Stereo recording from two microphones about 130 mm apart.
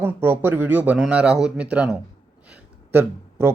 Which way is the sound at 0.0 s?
15° right (ahead or behind).